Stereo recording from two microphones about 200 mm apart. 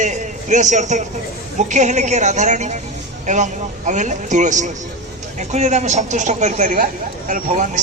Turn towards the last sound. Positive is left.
turn(degrees=-35)  # may be behind; listen again after turning